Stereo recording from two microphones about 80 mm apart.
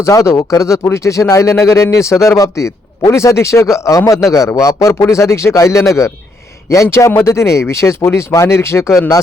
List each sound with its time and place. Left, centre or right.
0.0 s speech: left